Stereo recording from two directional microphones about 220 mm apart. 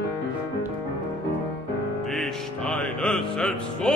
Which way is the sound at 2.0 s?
Centre (ahead or behind).